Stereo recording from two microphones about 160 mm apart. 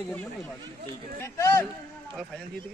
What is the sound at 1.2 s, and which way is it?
Speech, 15° left (ahead or behind).